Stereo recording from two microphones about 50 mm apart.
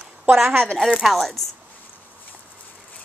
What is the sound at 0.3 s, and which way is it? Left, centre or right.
Speech, right.